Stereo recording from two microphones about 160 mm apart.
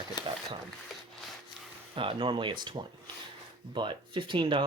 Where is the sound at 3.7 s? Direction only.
30° right (ahead or behind).